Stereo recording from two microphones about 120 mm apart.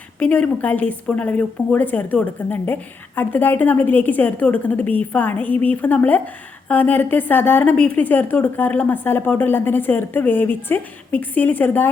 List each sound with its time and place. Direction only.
0.2 s a woman's voice: 10° left (ahead or behind)